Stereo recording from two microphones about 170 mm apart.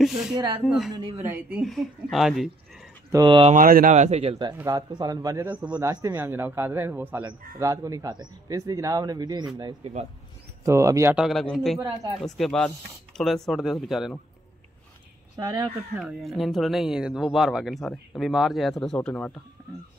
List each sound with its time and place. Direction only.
0.0 s speech: centre (ahead or behind)
0.9 s speech: 25° right (ahead or behind)
1.2 s a man's voice: 10° right (ahead or behind)
1.7 s speech: centre (ahead or behind)
3.1 s speech: 25° right (ahead or behind)
3.5 s speech: 55° right (ahead or behind); by 4.5 s 35° right (ahead or behind)
4.6 s speech: 20° right (ahead or behind)
5.4 s a man's voice: 10° right (ahead or behind)
10.6 s a man's voice: 15° right (ahead or behind)
11.1 s speech: centre (ahead or behind)
15.3 s speech: 20° right (ahead or behind)
16.0 s speech: centre (ahead or behind)